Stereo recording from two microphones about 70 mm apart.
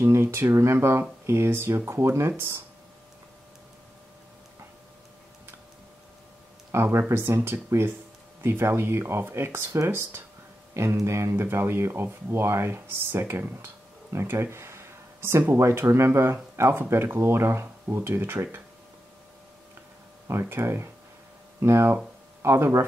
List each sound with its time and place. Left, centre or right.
0.0 s speech: right
6.7 s speech: right
14.1 s a sound: right
15.5 s speech: right
20.2 s speech: right